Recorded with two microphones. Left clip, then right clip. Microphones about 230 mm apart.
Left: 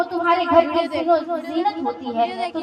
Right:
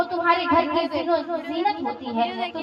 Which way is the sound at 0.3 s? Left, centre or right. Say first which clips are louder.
Left 4 dB; left.